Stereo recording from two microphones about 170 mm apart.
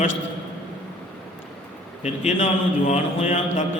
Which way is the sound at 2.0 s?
40° left (ahead or behind).